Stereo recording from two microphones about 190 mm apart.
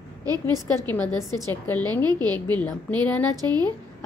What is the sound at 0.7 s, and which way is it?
Speech, 10° left (ahead or behind).